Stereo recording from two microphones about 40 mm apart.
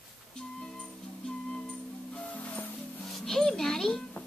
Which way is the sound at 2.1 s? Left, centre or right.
Left.